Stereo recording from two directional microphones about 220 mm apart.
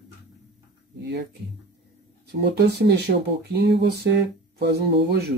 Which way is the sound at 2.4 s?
50° right (ahead or behind).